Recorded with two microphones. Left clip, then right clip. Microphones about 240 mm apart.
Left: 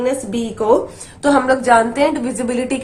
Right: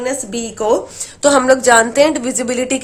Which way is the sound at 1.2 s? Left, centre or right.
Right.